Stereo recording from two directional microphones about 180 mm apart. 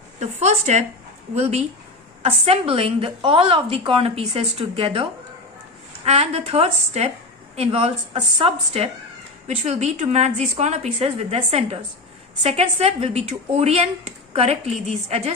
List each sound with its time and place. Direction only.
0.2 s a woman's voice: 40° right (ahead or behind)
6.1 s a woman's voice: 35° right (ahead or behind)